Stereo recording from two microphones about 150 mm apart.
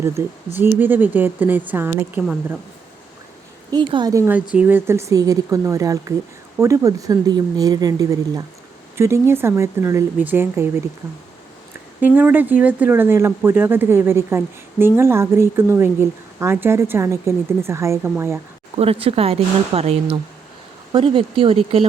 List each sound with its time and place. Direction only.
0.0 s speech: 15° right (ahead or behind)
3.7 s speech: 30° right (ahead or behind)
4.5 s speech: 10° right (ahead or behind)
11.9 s speech: 10° right (ahead or behind)
18.8 s speech: 40° right (ahead or behind)